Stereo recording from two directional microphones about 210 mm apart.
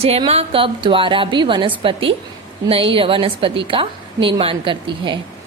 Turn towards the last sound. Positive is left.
turn(degrees=-25)  # may be behind; listen again after turning